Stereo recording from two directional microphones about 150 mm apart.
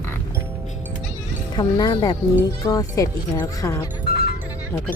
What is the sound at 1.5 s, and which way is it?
Speech, 30° left (ahead or behind).